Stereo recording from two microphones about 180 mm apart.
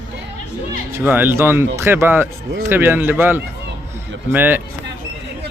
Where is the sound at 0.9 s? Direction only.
10° right (ahead or behind).